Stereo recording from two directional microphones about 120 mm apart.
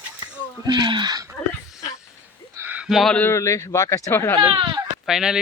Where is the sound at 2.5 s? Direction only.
15° right (ahead or behind).